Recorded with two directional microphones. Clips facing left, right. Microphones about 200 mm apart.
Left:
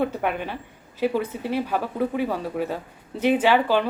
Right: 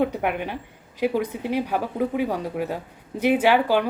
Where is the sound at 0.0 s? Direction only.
10° right (ahead or behind).